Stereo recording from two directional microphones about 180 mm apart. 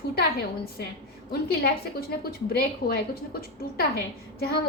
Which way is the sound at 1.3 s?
60° left (ahead or behind).